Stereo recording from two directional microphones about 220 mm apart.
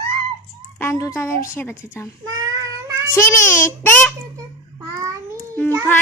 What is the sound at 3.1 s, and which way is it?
Speech, 10° left (ahead or behind).